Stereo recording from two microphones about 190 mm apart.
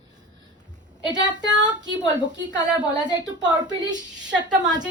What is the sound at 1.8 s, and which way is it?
Speech, 70° right (ahead or behind).